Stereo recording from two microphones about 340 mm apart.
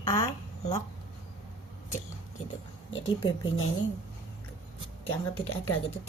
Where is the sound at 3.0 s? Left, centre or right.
Centre.